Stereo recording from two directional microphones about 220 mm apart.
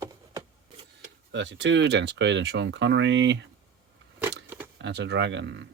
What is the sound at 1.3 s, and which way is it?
Speech, 55° right (ahead or behind).